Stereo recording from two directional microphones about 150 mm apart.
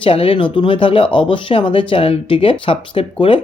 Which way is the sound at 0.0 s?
35° left (ahead or behind).